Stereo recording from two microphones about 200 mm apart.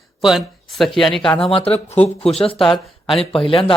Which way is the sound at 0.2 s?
Centre (ahead or behind).